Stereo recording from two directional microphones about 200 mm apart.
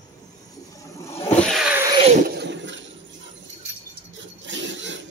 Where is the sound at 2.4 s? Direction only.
65° right (ahead or behind).